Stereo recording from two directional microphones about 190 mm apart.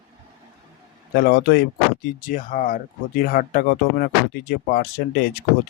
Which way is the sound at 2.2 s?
45° left (ahead or behind).